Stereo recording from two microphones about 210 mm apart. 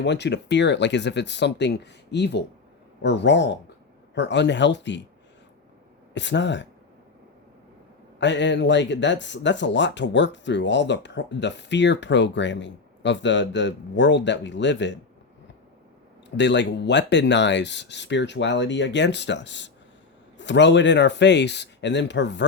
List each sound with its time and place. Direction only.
0.0 s speech: 55° left (ahead or behind)
6.1 s speech: 55° left (ahead or behind)
8.2 s speech: 60° left (ahead or behind)
16.4 s speech: 55° left (ahead or behind)